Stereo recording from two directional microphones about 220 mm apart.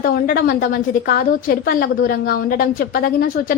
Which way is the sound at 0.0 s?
40° left (ahead or behind).